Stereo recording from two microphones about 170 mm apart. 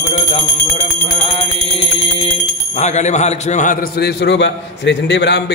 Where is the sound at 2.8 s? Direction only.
45° left (ahead or behind).